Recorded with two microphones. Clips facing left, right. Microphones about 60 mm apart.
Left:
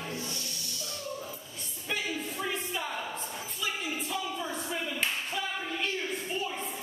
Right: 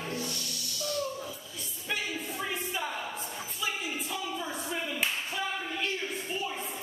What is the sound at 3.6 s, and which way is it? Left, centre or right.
Clapping, centre.